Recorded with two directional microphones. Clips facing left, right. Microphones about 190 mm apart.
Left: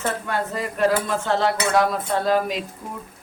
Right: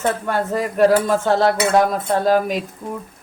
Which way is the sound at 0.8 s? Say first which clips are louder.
Right 6 dB; 40° right (ahead or behind).